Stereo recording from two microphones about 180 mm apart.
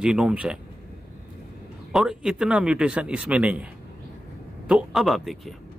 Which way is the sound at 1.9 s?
5° right (ahead or behind).